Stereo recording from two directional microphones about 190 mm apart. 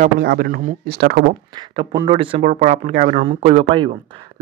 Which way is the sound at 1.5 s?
25° right (ahead or behind).